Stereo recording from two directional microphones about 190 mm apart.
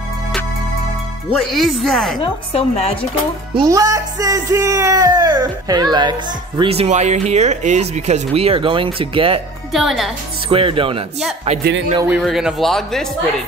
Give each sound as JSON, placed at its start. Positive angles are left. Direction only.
{"t": 1.3, "sound": "a man's voice", "side_deg": 0}
{"t": 2.2, "sound": "a woman's voice", "side_deg": 35}
{"t": 3.5, "sound": "speech", "side_deg": -20}
{"t": 9.7, "sound": "a man's voice", "side_deg": 0}
{"t": 10.5, "sound": "speech", "side_deg": -30}
{"t": 12.1, "sound": "a man's voice", "side_deg": 0}